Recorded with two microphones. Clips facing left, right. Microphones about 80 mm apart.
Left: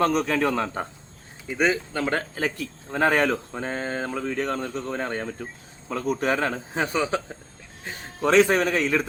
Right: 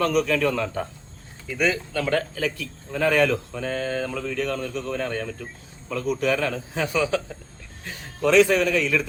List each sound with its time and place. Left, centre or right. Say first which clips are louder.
0.0 s a man's voice: even; left